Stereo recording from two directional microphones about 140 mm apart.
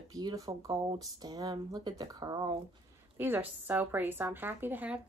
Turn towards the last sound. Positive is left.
turn(degrees=-10)  # may be behind; listen again after turning